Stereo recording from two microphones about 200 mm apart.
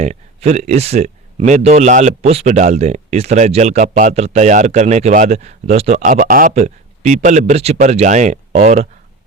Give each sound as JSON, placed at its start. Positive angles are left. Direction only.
{"t": 0.0, "sound": "speech", "side_deg": -35}